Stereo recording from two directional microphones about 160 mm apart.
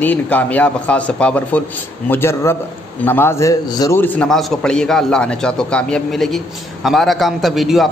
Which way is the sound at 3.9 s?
10° left (ahead or behind).